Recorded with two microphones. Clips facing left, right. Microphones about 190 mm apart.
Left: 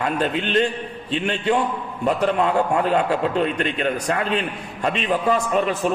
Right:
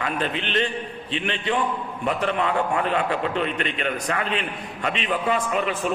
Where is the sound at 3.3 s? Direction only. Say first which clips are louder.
Left 4 dB; 40° left (ahead or behind).